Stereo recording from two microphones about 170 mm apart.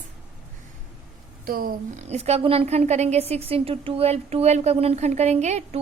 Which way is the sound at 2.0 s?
40° right (ahead or behind).